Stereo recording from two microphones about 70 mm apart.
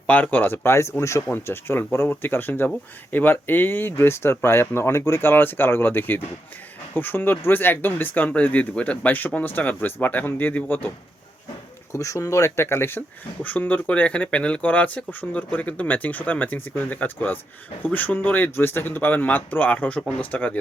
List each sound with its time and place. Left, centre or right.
0.1 s speech: left
11.9 s speech: left
13.4 s speech: left